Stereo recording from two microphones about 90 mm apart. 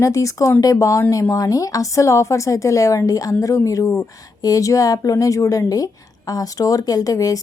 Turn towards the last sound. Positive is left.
turn(degrees=40)  # may be behind; listen again after turning